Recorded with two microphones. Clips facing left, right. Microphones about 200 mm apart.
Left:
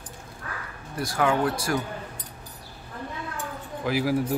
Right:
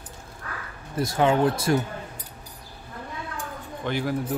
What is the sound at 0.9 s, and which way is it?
Speech, 25° right (ahead or behind).